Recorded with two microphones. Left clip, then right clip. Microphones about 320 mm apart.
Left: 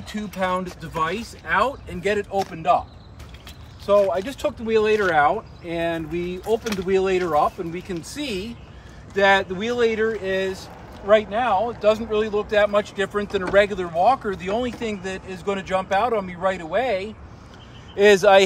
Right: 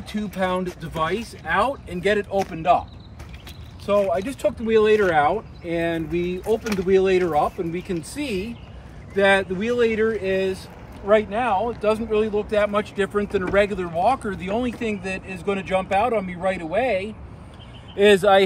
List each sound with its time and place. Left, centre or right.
0.1 s speech: centre
3.8 s speech: centre
17.9 s speech: centre